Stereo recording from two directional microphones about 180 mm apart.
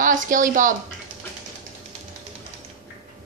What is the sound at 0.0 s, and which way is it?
Speech, 45° right (ahead or behind).